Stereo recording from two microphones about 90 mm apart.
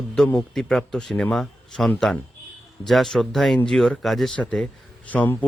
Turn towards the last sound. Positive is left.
turn(degrees=15)  # may be behind; listen again after turning